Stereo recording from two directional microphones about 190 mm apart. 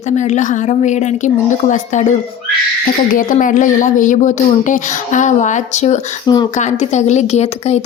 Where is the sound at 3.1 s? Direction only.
45° left (ahead or behind).